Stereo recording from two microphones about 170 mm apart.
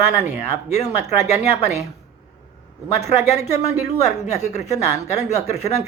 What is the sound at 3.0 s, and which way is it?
Speech, 40° left (ahead or behind).